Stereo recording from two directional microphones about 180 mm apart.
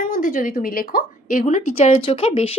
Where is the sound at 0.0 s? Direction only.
50° left (ahead or behind).